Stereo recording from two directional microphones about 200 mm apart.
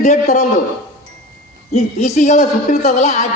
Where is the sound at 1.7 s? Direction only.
35° left (ahead or behind).